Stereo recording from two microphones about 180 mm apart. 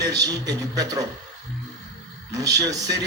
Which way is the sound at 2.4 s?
20° right (ahead or behind).